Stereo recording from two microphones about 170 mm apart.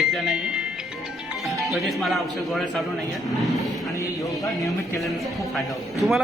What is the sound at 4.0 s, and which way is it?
Speech, 20° left (ahead or behind).